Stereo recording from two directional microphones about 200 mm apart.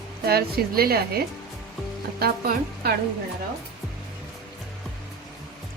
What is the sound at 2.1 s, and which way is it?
Speech, 50° right (ahead or behind).